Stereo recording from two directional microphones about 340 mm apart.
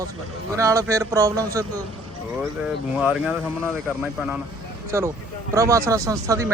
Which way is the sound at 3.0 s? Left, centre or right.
Centre.